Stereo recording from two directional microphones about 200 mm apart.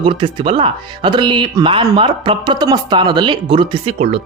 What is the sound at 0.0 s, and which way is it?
Speech, 25° right (ahead or behind).